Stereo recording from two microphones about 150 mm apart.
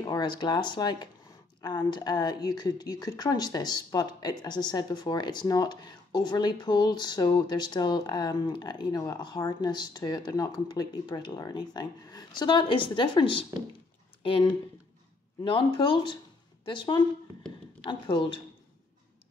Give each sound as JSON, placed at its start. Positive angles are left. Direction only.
{"t": 0.0, "sound": "a woman's voice", "side_deg": 25}